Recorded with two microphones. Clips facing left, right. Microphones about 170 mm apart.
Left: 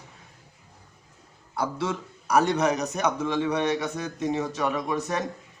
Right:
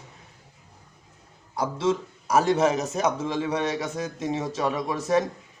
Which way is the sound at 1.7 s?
25° right (ahead or behind).